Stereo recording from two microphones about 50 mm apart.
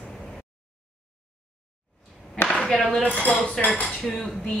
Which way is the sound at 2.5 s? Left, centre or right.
Centre.